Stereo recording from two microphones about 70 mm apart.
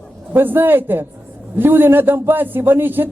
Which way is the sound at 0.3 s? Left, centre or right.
Right.